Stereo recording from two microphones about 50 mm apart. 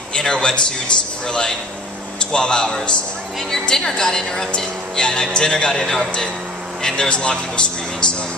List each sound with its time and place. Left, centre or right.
0.1 s a man's voice: centre